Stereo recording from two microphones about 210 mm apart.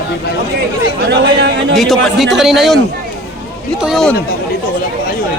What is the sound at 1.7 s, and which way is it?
A man's voice, centre (ahead or behind).